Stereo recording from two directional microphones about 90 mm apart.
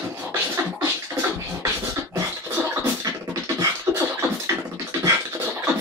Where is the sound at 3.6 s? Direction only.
35° right (ahead or behind).